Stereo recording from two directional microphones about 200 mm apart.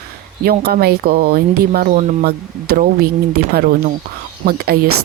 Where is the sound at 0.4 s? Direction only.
50° right (ahead or behind).